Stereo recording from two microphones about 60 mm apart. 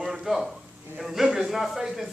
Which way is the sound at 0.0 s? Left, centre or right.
Centre.